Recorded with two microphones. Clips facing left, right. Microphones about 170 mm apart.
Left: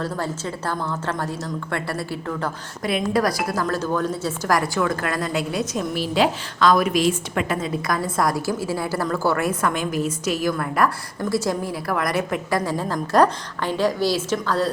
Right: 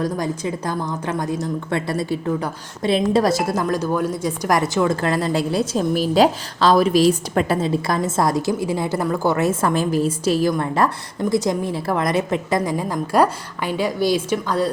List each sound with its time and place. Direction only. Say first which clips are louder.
0.0 s a woman's voice: right 4 dB; 15° right (ahead or behind)